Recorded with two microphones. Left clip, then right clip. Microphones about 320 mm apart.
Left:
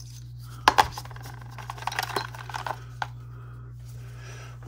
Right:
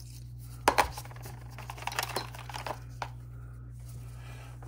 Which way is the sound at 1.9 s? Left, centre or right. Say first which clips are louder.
Left 4 dB; centre.